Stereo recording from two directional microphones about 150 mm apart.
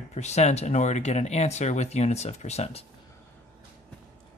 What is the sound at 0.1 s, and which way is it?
Speech, 50° left (ahead or behind).